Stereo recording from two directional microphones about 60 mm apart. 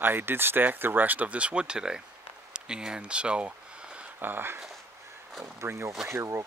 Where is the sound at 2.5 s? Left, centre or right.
Centre.